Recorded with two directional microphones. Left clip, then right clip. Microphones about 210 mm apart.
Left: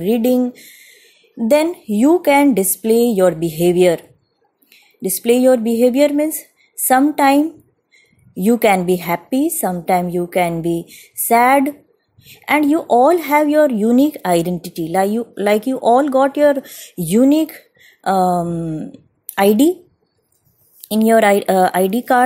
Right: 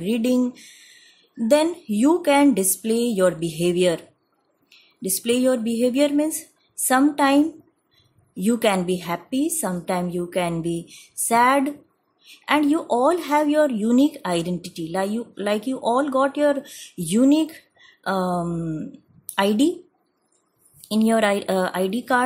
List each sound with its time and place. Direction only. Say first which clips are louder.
0.0 s speech: left 7 dB; 15° left (ahead or behind)
20.8 s speech: left 8 dB; 20° left (ahead or behind)